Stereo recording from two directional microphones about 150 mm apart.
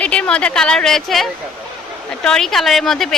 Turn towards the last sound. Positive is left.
turn(degrees=0)  # may be behind; listen again after turning